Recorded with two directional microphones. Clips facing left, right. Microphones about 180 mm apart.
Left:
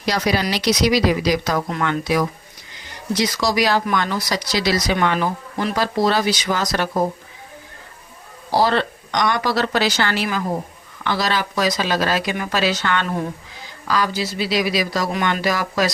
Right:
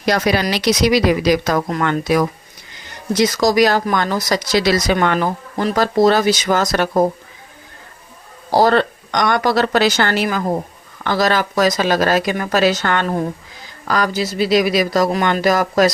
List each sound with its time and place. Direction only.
0.0 s speech: 55° right (ahead or behind)
8.5 s speech: 45° right (ahead or behind)